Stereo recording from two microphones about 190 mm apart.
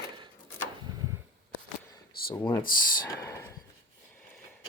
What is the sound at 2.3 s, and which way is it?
Speech, 10° left (ahead or behind).